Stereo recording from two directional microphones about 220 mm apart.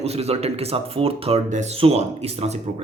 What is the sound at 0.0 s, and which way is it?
Speech, 30° right (ahead or behind).